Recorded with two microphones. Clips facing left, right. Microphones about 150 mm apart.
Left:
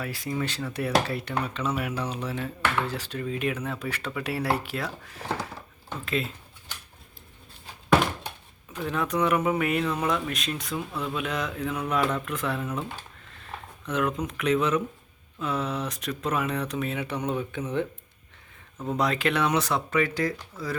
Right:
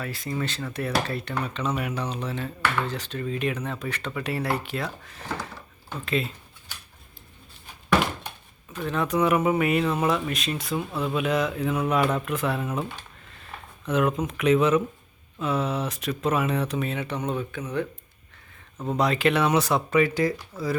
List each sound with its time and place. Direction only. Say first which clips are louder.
0.0 s speech: even; 10° left (ahead or behind)
8.7 s speech: right 2 dB; 10° left (ahead or behind)
9.0 s speech: right 3 dB; 5° right (ahead or behind)
13.8 s speech: right 4 dB; 10° right (ahead or behind)
16.8 s speech: right 1 dB; 5° left (ahead or behind)
17.6 s speech: left 2 dB; 25° left (ahead or behind)
18.9 s speech: right 3 dB; centre (ahead or behind)